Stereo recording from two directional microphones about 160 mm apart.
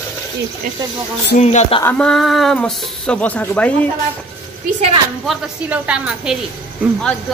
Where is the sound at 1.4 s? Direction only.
45° left (ahead or behind).